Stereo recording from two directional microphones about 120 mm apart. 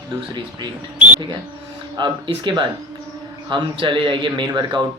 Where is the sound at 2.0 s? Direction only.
40° right (ahead or behind).